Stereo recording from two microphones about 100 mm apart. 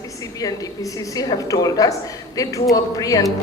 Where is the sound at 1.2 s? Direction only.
40° left (ahead or behind).